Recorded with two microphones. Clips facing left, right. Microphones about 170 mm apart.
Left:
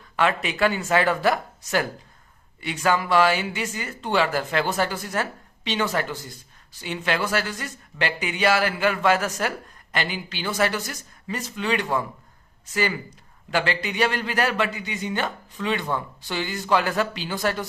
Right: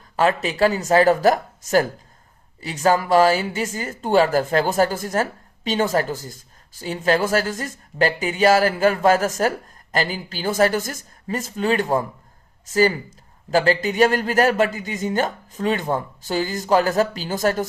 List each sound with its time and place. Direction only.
0.2 s a woman's voice: 35° right (ahead or behind)